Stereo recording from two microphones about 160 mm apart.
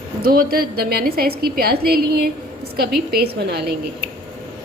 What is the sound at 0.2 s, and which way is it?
A woman's voice, 65° right (ahead or behind).